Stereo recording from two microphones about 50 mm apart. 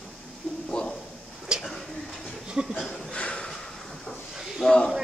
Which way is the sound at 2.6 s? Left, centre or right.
Centre.